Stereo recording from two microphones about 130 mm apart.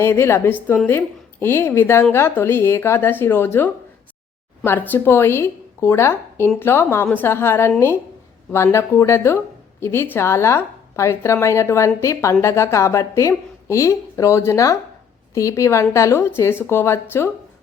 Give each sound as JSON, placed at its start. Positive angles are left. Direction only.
{"t": 0.0, "sound": "a woman's voice", "side_deg": 20}
{"t": 4.9, "sound": "a woman's voice", "side_deg": 15}